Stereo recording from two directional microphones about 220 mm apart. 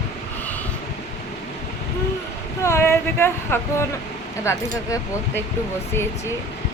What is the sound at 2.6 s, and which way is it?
Speech, 10° left (ahead or behind).